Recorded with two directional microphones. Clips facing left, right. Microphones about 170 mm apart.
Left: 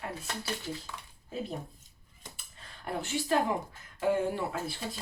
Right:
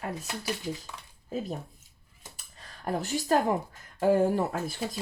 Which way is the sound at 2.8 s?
40° right (ahead or behind).